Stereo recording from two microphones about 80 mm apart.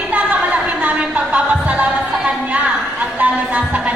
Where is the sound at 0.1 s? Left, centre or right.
Centre.